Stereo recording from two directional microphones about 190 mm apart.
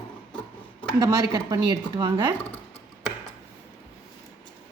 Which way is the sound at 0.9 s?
20° right (ahead or behind).